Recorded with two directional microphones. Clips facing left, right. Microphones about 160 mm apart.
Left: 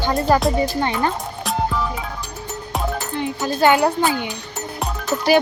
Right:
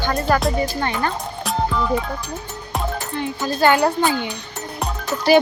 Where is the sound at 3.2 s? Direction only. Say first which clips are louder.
Left 1 dB; 15° left (ahead or behind).